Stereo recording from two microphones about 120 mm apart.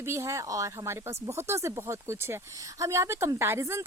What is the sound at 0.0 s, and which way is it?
Speech, 20° right (ahead or behind).